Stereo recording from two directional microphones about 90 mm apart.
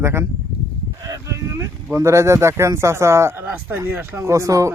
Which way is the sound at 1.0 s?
35° right (ahead or behind).